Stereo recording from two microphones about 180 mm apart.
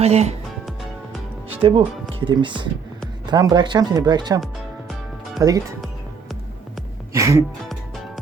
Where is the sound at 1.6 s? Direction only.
30° right (ahead or behind).